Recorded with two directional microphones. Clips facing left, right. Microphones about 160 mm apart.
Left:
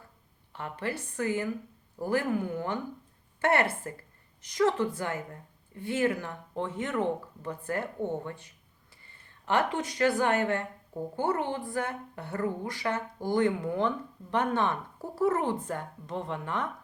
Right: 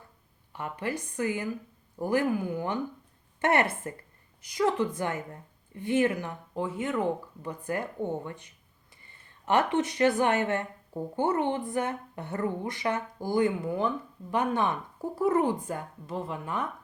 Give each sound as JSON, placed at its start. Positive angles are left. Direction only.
{"t": 0.5, "sound": "speech", "side_deg": -15}
{"t": 9.5, "sound": "speech", "side_deg": -20}